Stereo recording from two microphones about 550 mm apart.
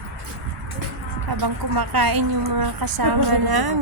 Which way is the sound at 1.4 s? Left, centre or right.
Right.